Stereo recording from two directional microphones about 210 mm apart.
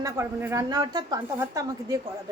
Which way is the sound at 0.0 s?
15° right (ahead or behind).